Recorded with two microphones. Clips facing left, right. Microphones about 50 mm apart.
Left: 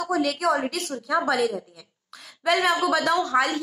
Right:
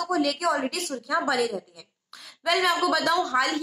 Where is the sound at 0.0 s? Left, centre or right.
Centre.